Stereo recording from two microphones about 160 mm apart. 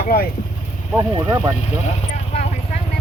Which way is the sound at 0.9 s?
10° right (ahead or behind).